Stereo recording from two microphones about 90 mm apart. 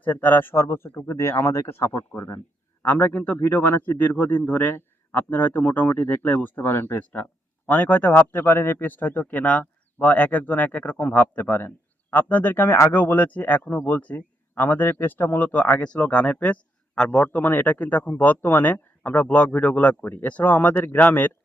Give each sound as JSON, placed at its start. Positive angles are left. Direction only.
{"t": 0.0, "sound": "a man's voice", "side_deg": 20}
{"t": 17.2, "sound": "speech", "side_deg": 20}